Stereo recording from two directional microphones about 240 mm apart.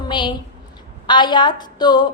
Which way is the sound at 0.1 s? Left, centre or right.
Centre.